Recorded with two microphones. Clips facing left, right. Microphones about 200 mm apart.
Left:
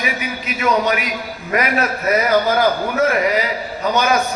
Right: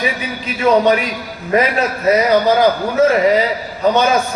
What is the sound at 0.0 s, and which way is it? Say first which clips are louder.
A man's voice: right 3 dB; 30° right (ahead or behind).